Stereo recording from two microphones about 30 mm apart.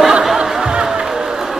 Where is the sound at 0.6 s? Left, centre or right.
Right.